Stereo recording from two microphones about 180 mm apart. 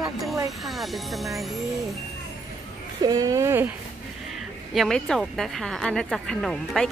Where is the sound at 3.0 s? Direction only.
20° right (ahead or behind).